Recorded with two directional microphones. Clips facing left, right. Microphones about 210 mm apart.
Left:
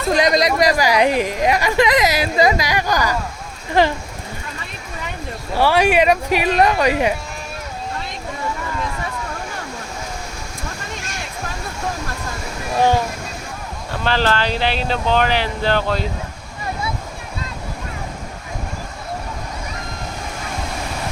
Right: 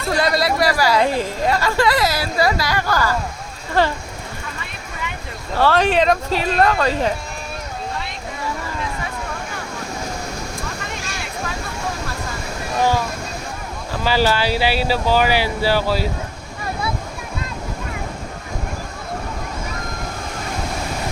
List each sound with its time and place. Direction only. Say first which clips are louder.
0.1 s speech: left 3 dB; 20° left (ahead or behind)
5.5 s speech: left 1 dB; 10° left (ahead or behind)
13.9 s speech: right 1 dB; 5° right (ahead or behind)